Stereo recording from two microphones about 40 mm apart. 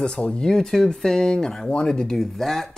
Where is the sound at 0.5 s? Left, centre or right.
Centre.